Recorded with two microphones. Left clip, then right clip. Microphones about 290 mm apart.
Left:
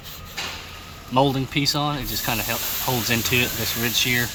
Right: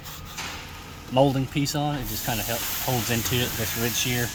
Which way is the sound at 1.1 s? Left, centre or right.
Centre.